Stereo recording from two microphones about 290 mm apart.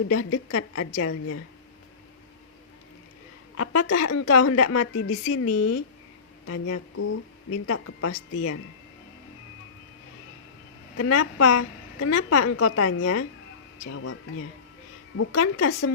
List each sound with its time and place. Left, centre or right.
0.1 s a woman's voice: left
3.6 s a woman's voice: left
10.9 s a woman's voice: left